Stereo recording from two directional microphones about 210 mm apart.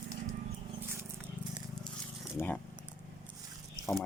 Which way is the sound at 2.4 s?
5° right (ahead or behind).